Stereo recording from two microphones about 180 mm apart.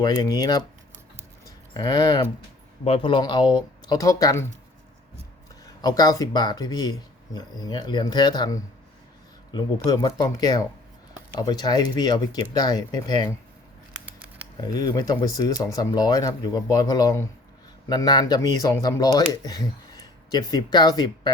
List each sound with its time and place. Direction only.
0.0 s speech: 25° left (ahead or behind)
1.7 s speech: 20° left (ahead or behind)
5.8 s speech: 20° left (ahead or behind)
14.6 s speech: 20° left (ahead or behind)